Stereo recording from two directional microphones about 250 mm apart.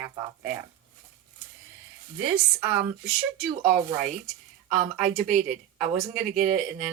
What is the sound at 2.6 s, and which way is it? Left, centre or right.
Speech, centre.